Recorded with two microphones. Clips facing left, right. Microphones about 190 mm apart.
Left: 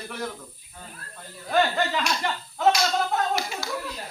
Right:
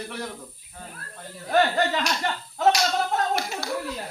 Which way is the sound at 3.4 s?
60° right (ahead or behind).